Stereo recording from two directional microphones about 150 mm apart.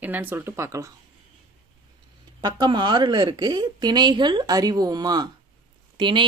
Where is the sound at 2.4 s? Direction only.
30° right (ahead or behind).